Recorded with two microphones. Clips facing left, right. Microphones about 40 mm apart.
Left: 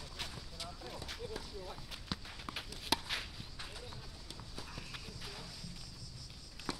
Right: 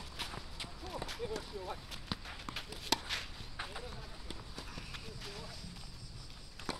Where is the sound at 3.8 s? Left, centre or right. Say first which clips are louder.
Right 2 dB; centre.